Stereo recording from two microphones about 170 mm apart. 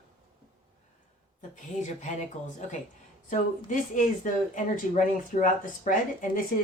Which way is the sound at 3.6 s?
50° left (ahead or behind).